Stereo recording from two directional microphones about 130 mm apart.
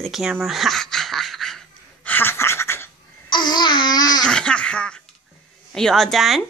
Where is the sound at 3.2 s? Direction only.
35° left (ahead or behind).